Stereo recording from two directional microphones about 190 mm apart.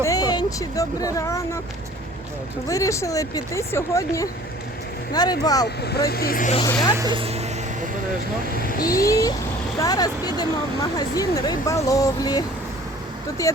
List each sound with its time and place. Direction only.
0.0 s speech: 20° left (ahead or behind)
2.6 s speech: 15° left (ahead or behind)
5.6 s speech: 60° left (ahead or behind)
6.9 s speech: 20° right (ahead or behind)
8.8 s speech: 20° left (ahead or behind)